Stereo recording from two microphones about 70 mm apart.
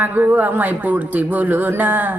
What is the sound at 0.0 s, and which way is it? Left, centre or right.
Speech, right.